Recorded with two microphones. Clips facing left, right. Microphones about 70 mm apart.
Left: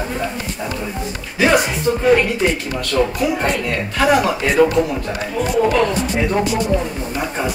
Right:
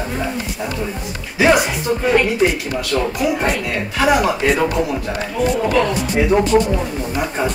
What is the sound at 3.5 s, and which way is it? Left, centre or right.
A man's voice, centre.